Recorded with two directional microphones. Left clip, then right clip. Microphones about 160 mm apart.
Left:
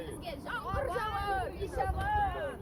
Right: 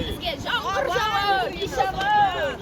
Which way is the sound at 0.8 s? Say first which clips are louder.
Right 12 dB; 35° right (ahead or behind).